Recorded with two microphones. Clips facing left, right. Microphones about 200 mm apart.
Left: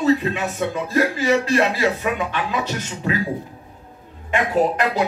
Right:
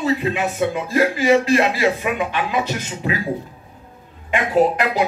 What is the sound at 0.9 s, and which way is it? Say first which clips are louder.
Speech: right 3 dB; 15° right (ahead or behind).